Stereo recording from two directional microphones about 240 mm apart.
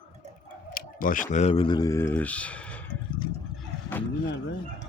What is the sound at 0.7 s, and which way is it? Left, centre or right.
Speech, left.